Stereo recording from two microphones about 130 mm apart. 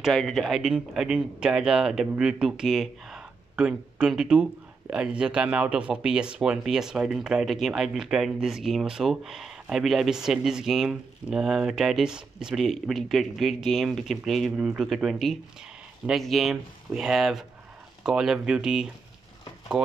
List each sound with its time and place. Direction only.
0.0 s speech: centre (ahead or behind)